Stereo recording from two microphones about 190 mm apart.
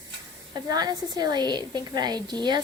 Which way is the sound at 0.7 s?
20° right (ahead or behind).